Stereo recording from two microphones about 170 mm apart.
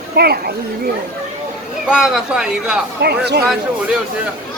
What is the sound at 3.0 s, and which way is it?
Speech, 75° right (ahead or behind).